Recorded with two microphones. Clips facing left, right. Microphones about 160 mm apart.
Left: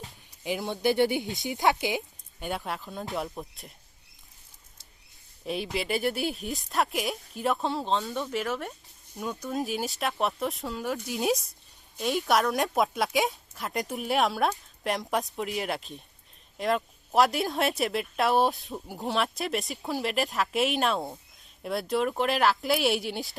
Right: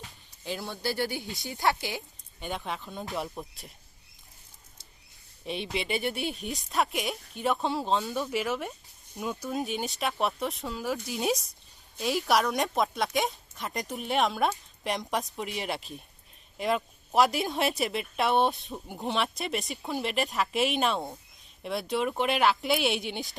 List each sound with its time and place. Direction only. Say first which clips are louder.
0.4 s speech: left 6 dB; 15° left (ahead or behind)
2.4 s speech: left 2 dB; 5° left (ahead or behind)
5.5 s speech: left 2 dB; centre (ahead or behind)